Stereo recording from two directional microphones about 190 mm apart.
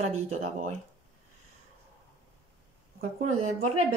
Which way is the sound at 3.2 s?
35° right (ahead or behind).